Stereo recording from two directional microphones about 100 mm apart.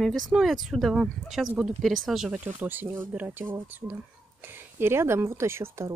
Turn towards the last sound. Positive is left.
turn(degrees=-25)  # may be behind; listen again after turning